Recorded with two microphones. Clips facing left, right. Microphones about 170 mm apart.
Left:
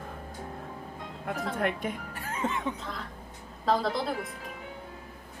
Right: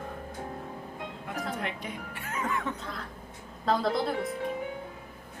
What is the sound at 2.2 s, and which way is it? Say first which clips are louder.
Speech: left 1 dB; 30° left (ahead or behind).